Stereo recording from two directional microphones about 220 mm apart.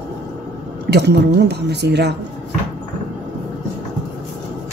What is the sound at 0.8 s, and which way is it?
A woman's voice, 50° right (ahead or behind).